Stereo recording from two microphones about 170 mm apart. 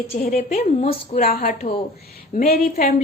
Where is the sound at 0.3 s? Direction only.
40° left (ahead or behind).